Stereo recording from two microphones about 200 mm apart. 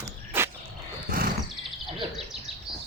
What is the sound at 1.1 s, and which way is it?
Wild animals, 45° right (ahead or behind).